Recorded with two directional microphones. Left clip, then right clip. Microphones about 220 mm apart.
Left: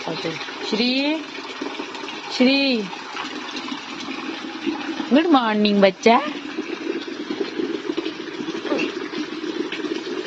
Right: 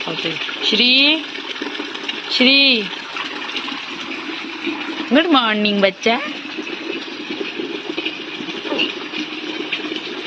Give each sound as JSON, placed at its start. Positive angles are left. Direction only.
{"t": 0.7, "sound": "speech", "side_deg": 10}
{"t": 2.4, "sound": "speech", "side_deg": 15}
{"t": 5.1, "sound": "a woman's voice", "side_deg": 15}